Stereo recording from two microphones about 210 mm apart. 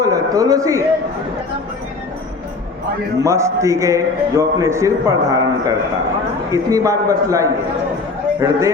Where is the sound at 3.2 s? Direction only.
15° right (ahead or behind).